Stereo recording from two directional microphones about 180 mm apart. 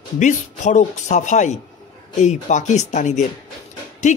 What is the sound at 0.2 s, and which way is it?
Speech, 45° left (ahead or behind).